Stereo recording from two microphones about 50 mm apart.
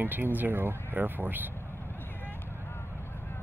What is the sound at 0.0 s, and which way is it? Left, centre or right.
Speech, right.